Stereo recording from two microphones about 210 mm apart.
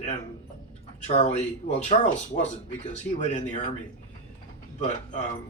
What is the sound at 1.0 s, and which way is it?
Speech, 35° left (ahead or behind).